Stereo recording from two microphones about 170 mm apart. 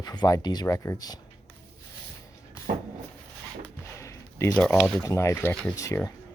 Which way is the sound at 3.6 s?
15° left (ahead or behind).